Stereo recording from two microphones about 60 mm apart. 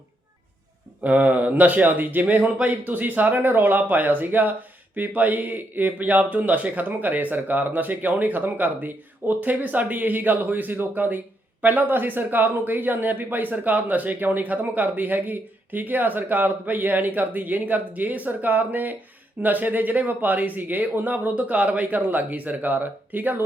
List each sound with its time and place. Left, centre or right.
1.0 s speech: right